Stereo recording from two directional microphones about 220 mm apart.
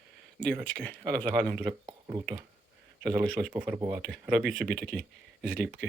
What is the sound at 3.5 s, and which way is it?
Speech, 10° right (ahead or behind).